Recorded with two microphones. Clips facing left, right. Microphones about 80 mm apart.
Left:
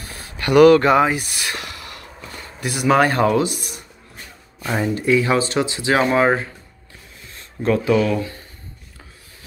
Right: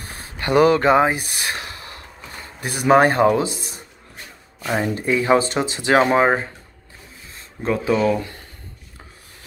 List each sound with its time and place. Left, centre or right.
0.0 s a sound: right
0.4 s speech: right
4.6 s speech: centre
4.9 s speech: right
7.6 s speech: right